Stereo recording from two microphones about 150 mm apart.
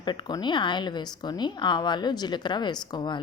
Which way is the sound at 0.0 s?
30° left (ahead or behind).